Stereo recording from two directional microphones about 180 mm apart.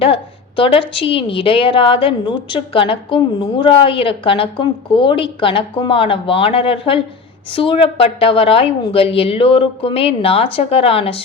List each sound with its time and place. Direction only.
0.0 s a woman's voice: 30° left (ahead or behind)